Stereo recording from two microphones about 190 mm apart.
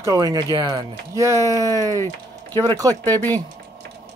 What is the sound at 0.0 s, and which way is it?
Speech, 20° right (ahead or behind).